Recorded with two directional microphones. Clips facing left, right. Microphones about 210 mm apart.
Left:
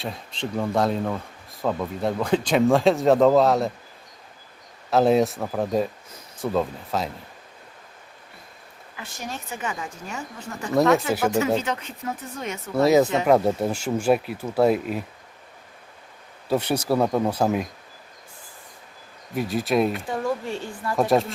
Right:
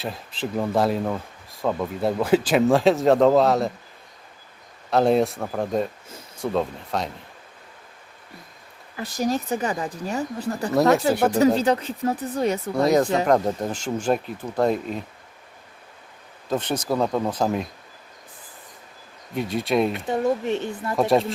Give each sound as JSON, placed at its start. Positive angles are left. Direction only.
{"t": 0.0, "sound": "speech", "side_deg": -5}
{"t": 4.9, "sound": "speech", "side_deg": 0}
{"t": 9.0, "sound": "speech", "side_deg": -35}
{"t": 12.7, "sound": "speech", "side_deg": 5}
{"t": 16.5, "sound": "speech", "side_deg": 10}
{"t": 19.3, "sound": "speech", "side_deg": 0}
{"t": 19.9, "sound": "speech", "side_deg": -20}
{"t": 20.9, "sound": "speech", "side_deg": 0}